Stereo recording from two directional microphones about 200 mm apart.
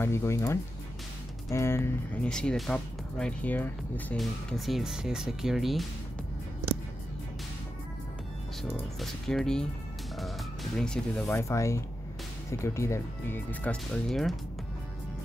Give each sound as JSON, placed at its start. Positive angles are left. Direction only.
{"t": 0.0, "sound": "speech", "side_deg": 15}
{"t": 8.6, "sound": "speech", "side_deg": 0}